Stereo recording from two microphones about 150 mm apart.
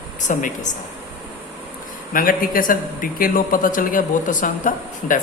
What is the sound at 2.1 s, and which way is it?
A man's voice, 70° left (ahead or behind).